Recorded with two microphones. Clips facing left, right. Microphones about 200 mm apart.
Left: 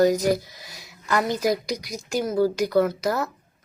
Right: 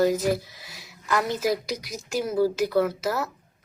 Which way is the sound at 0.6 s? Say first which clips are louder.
Left 1 dB; centre (ahead or behind).